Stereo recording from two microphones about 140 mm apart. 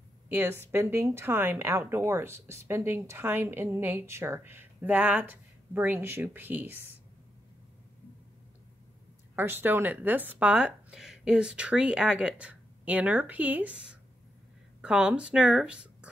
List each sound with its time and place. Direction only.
0.3 s a woman's voice: 15° right (ahead or behind)
9.3 s a woman's voice: 15° right (ahead or behind)